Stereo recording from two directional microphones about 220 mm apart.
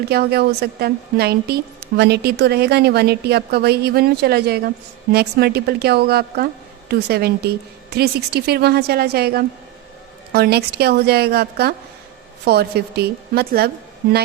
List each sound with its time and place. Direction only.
0.1 s a woman's voice: 45° right (ahead or behind)